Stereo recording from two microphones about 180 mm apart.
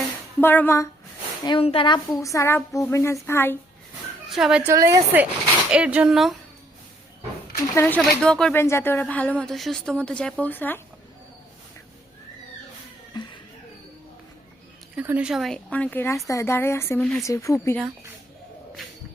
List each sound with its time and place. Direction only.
0.3 s a woman's voice: 10° left (ahead or behind)
1.5 s a woman's voice: 30° left (ahead or behind)
2.2 s a woman's voice: 15° left (ahead or behind)
2.6 s speech: centre (ahead or behind)
2.9 s a woman's voice: 15° left (ahead or behind)
4.3 s speech: centre (ahead or behind)
4.7 s a woman's voice: 15° right (ahead or behind); by 6.3 s centre (ahead or behind)
7.7 s a woman's voice: 10° left (ahead or behind)
8.5 s a woman's voice: 15° left (ahead or behind)
13.2 s a sound: 25° left (ahead or behind)
14.9 s a woman's voice: 10° right (ahead or behind); by 17.0 s 15° left (ahead or behind)
17.0 s speech: centre (ahead or behind)
17.2 s a woman's voice: 15° left (ahead or behind)